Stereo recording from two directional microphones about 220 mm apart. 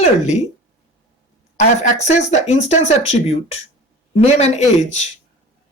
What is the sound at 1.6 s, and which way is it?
Speech, 30° left (ahead or behind).